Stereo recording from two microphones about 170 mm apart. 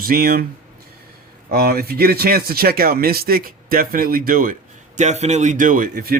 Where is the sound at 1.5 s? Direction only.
65° right (ahead or behind).